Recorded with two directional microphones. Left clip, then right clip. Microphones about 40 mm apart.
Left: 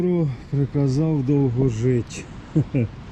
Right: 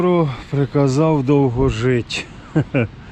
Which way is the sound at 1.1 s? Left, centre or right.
Left.